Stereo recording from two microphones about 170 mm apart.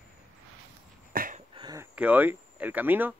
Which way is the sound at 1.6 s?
25° right (ahead or behind).